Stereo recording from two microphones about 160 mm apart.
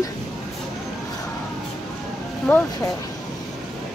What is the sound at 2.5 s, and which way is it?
Speech, 10° left (ahead or behind).